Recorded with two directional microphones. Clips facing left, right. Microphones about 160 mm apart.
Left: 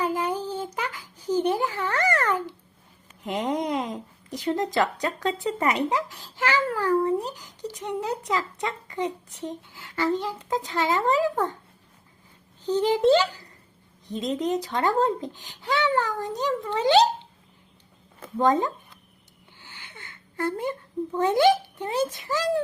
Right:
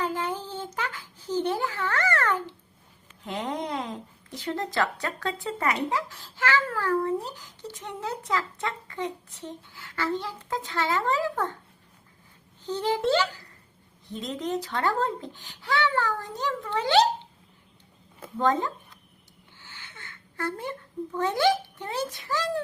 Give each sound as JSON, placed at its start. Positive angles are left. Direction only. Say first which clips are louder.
{"t": 0.0, "sound": "a sound", "louder": "left 3 dB", "side_deg": 10}
{"t": 3.2, "sound": "speech", "louder": "left 5 dB", "side_deg": 15}
{"t": 12.6, "sound": "speech", "louder": "left 6 dB", "side_deg": 15}
{"t": 18.3, "sound": "speech", "louder": "left 3 dB", "side_deg": 15}
{"t": 19.5, "sound": "a sound", "louder": "left 2 dB", "side_deg": 15}
{"t": 21.2, "sound": "a child's voice", "louder": "left 4 dB", "side_deg": 20}